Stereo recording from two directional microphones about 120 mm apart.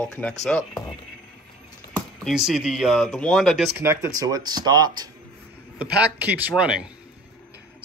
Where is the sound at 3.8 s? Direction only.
20° right (ahead or behind).